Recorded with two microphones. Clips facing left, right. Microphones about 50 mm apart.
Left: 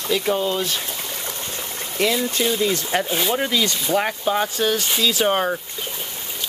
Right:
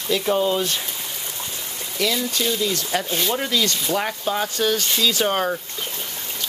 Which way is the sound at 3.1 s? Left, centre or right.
Centre.